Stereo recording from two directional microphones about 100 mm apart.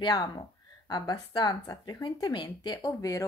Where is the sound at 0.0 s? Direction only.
45° left (ahead or behind).